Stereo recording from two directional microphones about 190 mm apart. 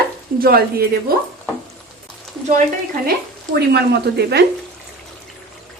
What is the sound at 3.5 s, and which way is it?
Speech, 60° right (ahead or behind).